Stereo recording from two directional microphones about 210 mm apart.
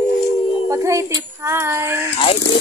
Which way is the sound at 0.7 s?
15° right (ahead or behind).